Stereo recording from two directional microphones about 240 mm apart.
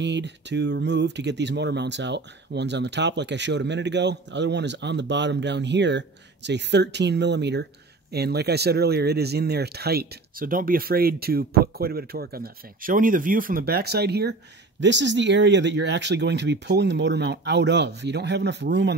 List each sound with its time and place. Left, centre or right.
0.0 s speech: right